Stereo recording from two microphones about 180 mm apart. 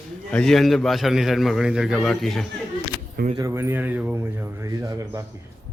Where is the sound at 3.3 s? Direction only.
15° right (ahead or behind).